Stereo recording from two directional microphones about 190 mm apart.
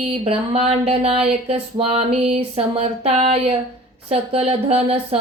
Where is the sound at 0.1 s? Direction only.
35° right (ahead or behind).